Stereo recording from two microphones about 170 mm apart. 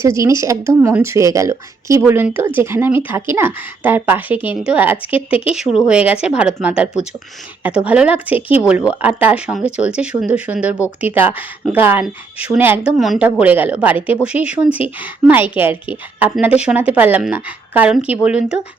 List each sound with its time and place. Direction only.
0.0 s a woman's voice: 15° right (ahead or behind)